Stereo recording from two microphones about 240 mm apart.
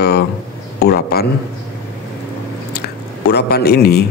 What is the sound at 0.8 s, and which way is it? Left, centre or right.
Speech, left.